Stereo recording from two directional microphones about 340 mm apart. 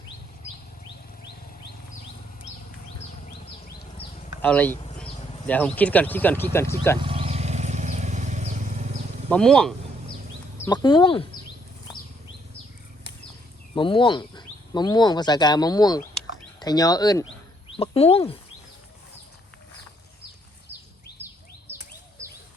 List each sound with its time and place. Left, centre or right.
4.4 s speech: centre
7.0 s vehicle: centre
9.3 s speech: centre
10.6 s speech: centre
13.7 s speech: centre
21.2 s a sound: centre